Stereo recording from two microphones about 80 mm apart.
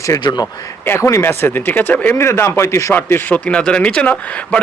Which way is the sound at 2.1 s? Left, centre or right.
Left.